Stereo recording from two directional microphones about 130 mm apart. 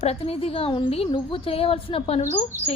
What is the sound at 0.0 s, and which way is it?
A woman's voice, 50° left (ahead or behind).